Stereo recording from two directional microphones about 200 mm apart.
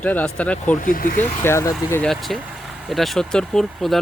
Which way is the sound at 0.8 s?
45° left (ahead or behind).